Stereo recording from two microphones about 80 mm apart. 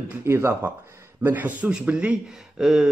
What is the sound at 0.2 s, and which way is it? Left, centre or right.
Speech, right.